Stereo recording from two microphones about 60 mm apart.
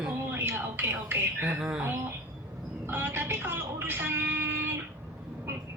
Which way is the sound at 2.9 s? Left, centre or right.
Right.